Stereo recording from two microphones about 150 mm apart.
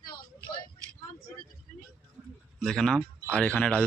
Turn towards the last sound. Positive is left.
turn(degrees=10)  # may be behind; listen again after turning